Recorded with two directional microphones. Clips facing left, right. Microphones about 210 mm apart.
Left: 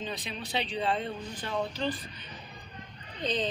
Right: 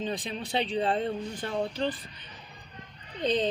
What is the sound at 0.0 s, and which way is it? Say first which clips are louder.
Speech: right 4 dB; 50° right (ahead or behind).